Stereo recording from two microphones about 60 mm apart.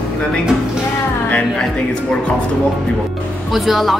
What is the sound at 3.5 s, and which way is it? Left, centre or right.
Speech, centre.